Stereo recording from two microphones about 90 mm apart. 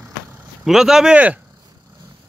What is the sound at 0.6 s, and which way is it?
Speech, 5° right (ahead or behind).